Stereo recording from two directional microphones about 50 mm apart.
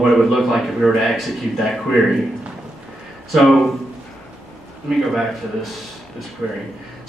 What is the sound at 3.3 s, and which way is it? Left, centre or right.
Speech, centre.